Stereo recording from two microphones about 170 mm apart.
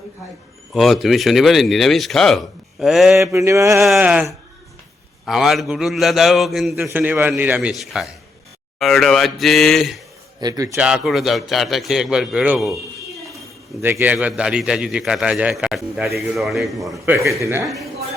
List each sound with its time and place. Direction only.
0.7 s a man's voice: centre (ahead or behind)
3.2 s a man's voice: 15° right (ahead or behind)
3.8 s a man's voice: 5° right (ahead or behind)
10.4 s a man's voice: 20° right (ahead or behind)
10.8 s a man's voice: 5° right (ahead or behind)
13.8 s a man's voice: 10° right (ahead or behind)
17.4 s a man's voice: 15° right (ahead or behind)